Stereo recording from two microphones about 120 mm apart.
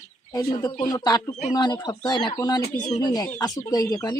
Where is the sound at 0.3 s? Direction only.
30° left (ahead or behind).